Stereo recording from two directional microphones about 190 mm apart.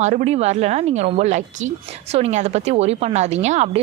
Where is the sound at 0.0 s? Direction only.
35° right (ahead or behind).